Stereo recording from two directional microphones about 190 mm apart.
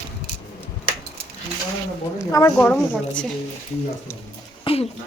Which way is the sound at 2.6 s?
5° left (ahead or behind).